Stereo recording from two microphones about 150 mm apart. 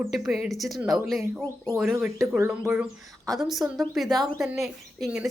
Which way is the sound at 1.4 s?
15° left (ahead or behind).